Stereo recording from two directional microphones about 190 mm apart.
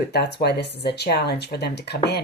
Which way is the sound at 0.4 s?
60° left (ahead or behind).